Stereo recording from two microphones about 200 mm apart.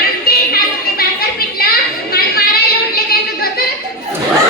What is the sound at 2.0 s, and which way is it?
Chatter, 50° left (ahead or behind).